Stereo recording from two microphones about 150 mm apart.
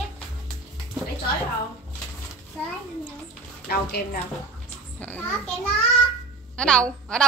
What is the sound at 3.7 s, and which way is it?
Speech, 90° left.